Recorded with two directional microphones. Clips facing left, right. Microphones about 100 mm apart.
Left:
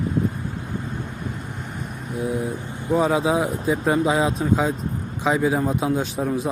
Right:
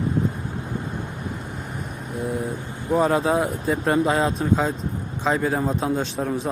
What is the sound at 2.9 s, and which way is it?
A man's voice, centre (ahead or behind).